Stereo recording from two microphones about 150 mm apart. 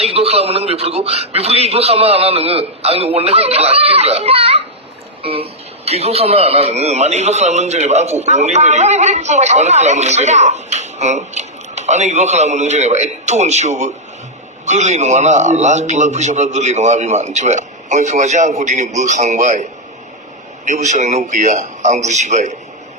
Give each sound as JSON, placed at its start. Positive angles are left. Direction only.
{"t": 0.0, "sound": "a man's voice", "side_deg": -45}
{"t": 20.7, "sound": "a man's voice", "side_deg": -50}